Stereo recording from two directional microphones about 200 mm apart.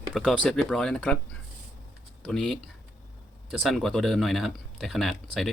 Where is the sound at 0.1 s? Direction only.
Centre (ahead or behind).